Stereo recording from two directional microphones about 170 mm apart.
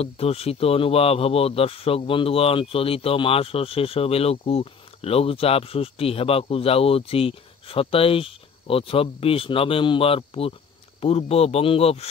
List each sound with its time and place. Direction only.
0.0 s speech: 35° left (ahead or behind)